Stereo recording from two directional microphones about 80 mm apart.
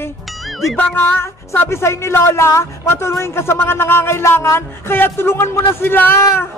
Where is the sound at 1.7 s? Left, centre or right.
Left.